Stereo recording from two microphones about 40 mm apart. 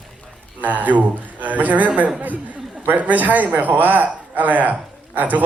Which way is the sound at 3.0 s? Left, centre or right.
Right.